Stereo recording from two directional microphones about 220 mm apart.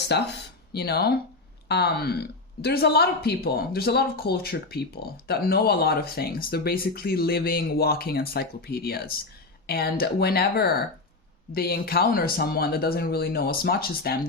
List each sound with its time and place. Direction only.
0.0 s speech: 50° left (ahead or behind)